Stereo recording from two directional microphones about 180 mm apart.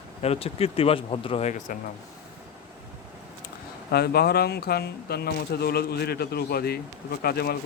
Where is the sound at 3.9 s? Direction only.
60° left (ahead or behind).